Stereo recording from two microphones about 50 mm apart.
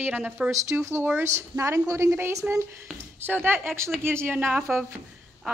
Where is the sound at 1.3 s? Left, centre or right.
Right.